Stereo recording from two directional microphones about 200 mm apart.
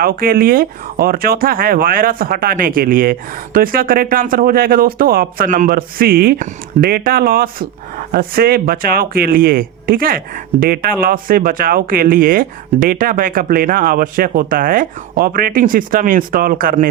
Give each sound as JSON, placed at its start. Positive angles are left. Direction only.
{"t": 0.0, "sound": "speech", "side_deg": -45}